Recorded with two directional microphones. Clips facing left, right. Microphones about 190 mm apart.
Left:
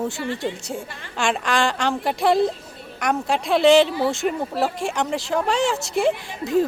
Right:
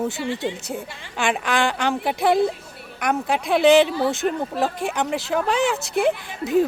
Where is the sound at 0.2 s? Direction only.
15° right (ahead or behind).